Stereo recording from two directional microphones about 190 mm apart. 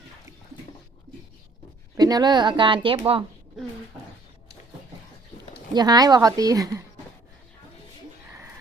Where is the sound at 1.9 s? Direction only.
20° right (ahead or behind).